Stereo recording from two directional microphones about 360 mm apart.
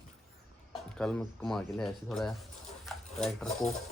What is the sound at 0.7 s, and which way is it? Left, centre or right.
Speech, centre.